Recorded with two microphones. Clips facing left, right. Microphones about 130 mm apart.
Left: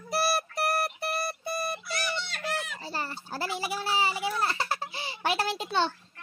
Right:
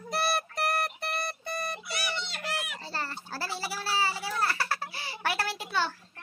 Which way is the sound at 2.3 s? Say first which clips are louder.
Left 2 dB; 10° right (ahead or behind).